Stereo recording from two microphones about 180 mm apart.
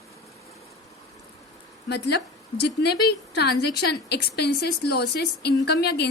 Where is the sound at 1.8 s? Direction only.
70° left (ahead or behind).